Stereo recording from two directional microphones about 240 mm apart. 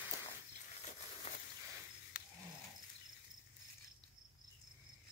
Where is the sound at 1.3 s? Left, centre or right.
Left.